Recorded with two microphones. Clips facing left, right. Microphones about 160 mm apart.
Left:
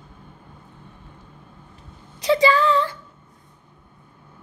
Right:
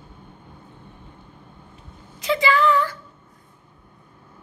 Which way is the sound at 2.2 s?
35° left (ahead or behind).